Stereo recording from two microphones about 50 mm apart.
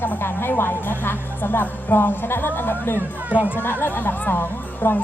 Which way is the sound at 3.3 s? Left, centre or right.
Right.